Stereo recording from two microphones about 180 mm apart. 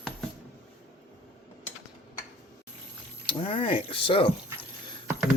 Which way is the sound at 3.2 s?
30° left (ahead or behind).